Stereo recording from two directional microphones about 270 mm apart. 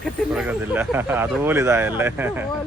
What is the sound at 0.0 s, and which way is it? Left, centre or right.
Speech, centre.